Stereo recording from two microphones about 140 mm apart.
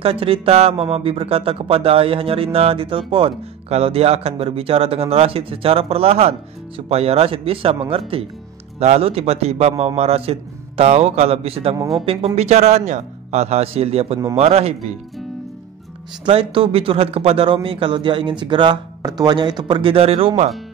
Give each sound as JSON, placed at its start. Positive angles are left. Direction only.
{"t": 0.0, "sound": "a man's voice", "side_deg": -40}
{"t": 16.3, "sound": "a man's voice", "side_deg": -40}